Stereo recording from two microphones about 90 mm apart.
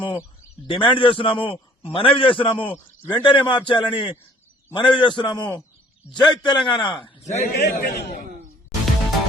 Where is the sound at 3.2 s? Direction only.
60° left (ahead or behind).